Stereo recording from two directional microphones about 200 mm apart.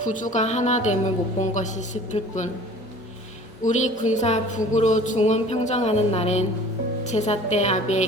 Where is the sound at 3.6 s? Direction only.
35° left (ahead or behind).